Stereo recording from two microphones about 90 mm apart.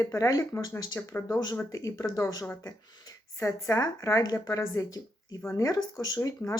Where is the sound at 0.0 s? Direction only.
35° left (ahead or behind).